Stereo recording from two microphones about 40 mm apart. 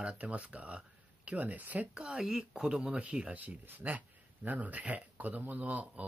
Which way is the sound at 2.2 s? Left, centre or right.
Centre.